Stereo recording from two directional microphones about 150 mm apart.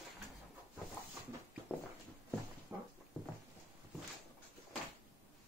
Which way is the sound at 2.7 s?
15° right (ahead or behind).